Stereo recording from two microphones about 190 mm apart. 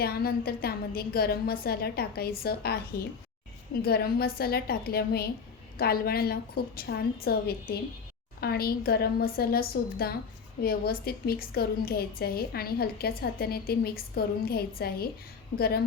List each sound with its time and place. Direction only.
0.0 s a woman's voice: 55° left (ahead or behind)